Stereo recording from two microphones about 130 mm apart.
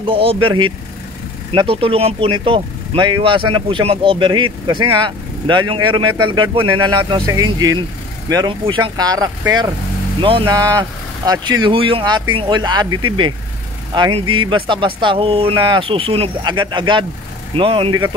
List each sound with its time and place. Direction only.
0.0 s speech: 45° right (ahead or behind)
10.2 s speech: 45° right (ahead or behind)
10.5 s speech: 30° right (ahead or behind); by 18.1 s 45° right (ahead or behind)